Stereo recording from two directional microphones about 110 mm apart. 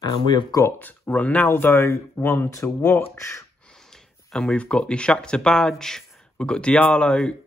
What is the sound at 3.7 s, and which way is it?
Speech, 5° left (ahead or behind).